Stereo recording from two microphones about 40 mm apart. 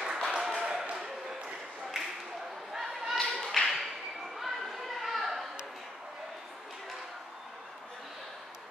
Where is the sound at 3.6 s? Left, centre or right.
Centre.